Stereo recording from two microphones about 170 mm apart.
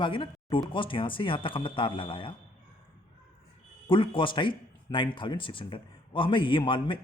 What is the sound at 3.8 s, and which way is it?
Speech, 30° left (ahead or behind).